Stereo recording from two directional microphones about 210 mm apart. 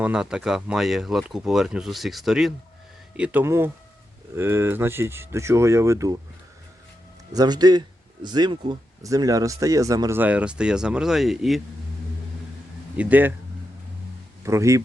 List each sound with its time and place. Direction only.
0.0 s speech: 5° right (ahead or behind)
7.3 s speech: 20° right (ahead or behind); by 11.6 s centre (ahead or behind)
13.0 s speech: 10° right (ahead or behind)
14.4 s speech: 15° right (ahead or behind)